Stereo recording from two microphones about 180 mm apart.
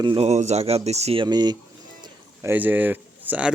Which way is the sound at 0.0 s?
30° right (ahead or behind).